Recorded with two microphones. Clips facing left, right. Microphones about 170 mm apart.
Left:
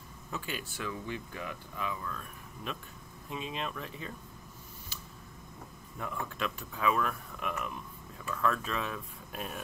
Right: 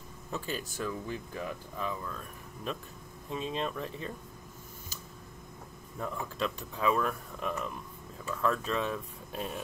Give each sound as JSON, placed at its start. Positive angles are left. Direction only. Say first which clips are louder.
{"t": 0.3, "sound": "speech", "louder": "right 3 dB", "side_deg": -35}
{"t": 6.2, "sound": "speech", "louder": "right 2 dB", "side_deg": -30}